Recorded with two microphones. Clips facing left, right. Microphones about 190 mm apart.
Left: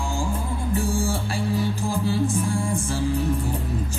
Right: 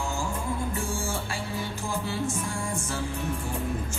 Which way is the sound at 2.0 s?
35° left (ahead or behind).